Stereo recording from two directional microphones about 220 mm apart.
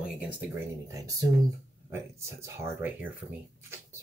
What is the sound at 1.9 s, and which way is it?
Speech, 10° right (ahead or behind).